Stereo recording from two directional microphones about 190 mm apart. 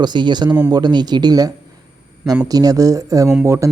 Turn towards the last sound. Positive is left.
turn(degrees=-15)  # may be behind; listen again after turning